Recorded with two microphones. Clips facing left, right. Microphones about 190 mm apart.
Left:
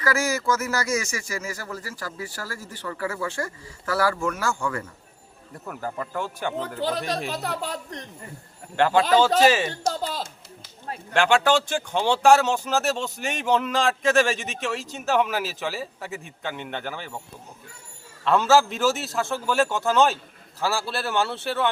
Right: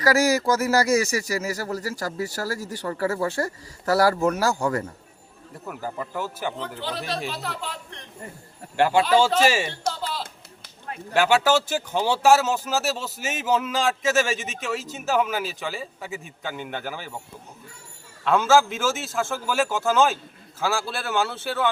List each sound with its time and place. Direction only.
0.0 s speech: 35° right (ahead or behind)
5.6 s speech: 5° right (ahead or behind)
6.6 s a man's voice: 45° left (ahead or behind)
8.7 s speech: 10° right (ahead or behind)
9.9 s a sound: 45° left (ahead or behind)
11.1 s speech: 5° right (ahead or behind)
18.3 s speech: centre (ahead or behind)